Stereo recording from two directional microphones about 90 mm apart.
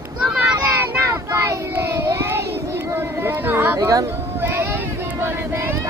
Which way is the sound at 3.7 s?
40° right (ahead or behind).